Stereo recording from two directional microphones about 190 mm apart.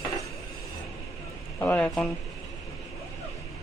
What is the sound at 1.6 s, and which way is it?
Speech, 5° left (ahead or behind).